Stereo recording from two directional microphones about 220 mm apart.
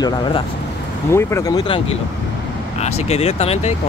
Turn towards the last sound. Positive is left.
turn(degrees=30)  # may be behind; listen again after turning